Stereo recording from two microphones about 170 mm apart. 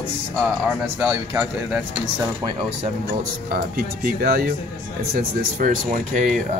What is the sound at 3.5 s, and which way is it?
Speech, 60° right (ahead or behind).